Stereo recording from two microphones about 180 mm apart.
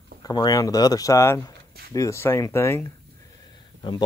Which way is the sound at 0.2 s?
20° left (ahead or behind).